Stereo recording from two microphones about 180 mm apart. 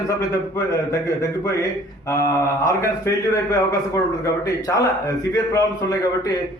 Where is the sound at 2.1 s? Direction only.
15° left (ahead or behind).